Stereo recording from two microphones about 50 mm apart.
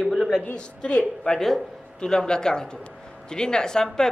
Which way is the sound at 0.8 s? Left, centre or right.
Left.